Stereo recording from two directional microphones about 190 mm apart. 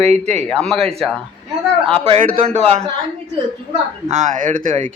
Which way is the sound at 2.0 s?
30° right (ahead or behind).